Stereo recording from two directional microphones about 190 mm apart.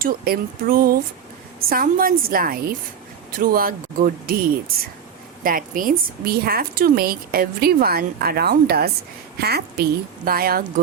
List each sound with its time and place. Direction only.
0.0 s a woman's voice: 50° right (ahead or behind)
5.4 s a woman's voice: 45° right (ahead or behind)